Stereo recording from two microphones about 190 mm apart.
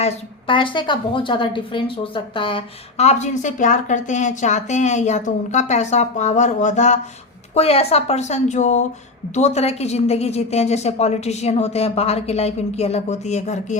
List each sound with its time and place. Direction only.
0.0 s a woman's voice: 25° left (ahead or behind)